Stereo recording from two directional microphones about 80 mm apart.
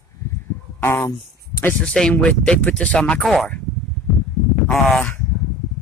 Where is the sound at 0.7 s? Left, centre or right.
Left.